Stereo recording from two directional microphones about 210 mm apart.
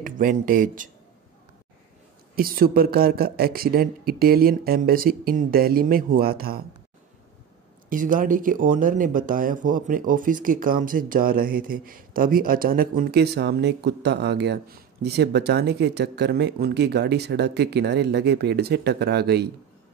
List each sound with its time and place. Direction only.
0.0 s speech: 40° right (ahead or behind)
2.3 s speech: 45° right (ahead or behind)
7.9 s speech: 40° right (ahead or behind)